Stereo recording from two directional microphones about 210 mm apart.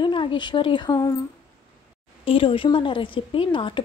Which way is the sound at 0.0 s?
25° left (ahead or behind).